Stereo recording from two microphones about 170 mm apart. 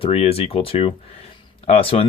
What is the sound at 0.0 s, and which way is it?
Speech, 35° left (ahead or behind).